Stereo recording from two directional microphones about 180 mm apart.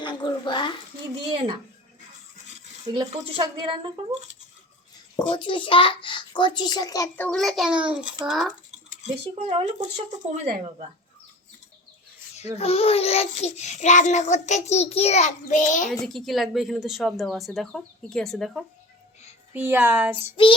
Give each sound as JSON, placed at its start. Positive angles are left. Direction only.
{"t": 0.0, "sound": "a sound", "side_deg": 25}
{"t": 1.3, "sound": "a sound", "side_deg": -30}
{"t": 2.9, "sound": "speech", "side_deg": -25}
{"t": 5.3, "sound": "a child's voice", "side_deg": 25}
{"t": 7.3, "sound": "speech", "side_deg": 0}
{"t": 9.0, "sound": "speech", "side_deg": -40}
{"t": 12.5, "sound": "child singing", "side_deg": 35}
{"t": 15.9, "sound": "speech", "side_deg": 0}
{"t": 19.5, "sound": "speech", "side_deg": -10}
{"t": 20.3, "sound": "a child's voice", "side_deg": 30}